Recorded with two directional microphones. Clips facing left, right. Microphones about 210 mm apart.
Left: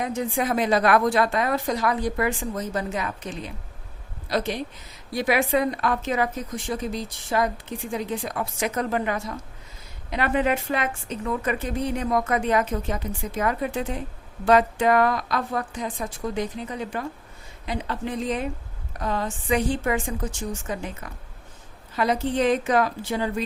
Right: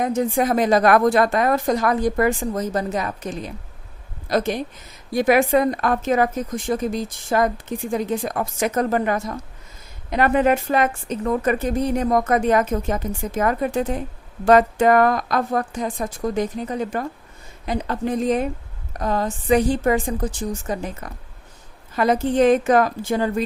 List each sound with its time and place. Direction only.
0.0 s a woman's voice: 45° right (ahead or behind)
21.9 s a woman's voice: 50° right (ahead or behind)